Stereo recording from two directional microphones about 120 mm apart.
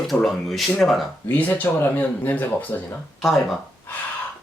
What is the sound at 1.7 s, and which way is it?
Speech, 15° left (ahead or behind).